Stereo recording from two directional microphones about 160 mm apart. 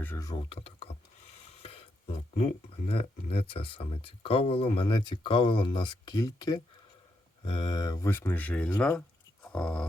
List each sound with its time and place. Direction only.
0.0 s speech: 15° left (ahead or behind)
0.3 s speech: 35° left (ahead or behind); by 9.8 s 5° left (ahead or behind)